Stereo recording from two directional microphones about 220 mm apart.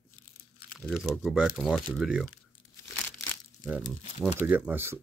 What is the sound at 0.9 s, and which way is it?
Speech, centre (ahead or behind).